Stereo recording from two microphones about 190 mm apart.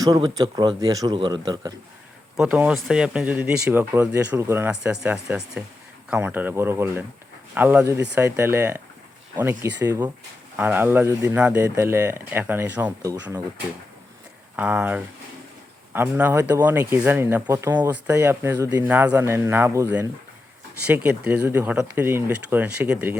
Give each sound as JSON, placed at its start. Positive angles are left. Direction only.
{"t": 0.0, "sound": "speech", "side_deg": -20}
{"t": 2.3, "sound": "speech", "side_deg": -5}
{"t": 14.5, "sound": "speech", "side_deg": -5}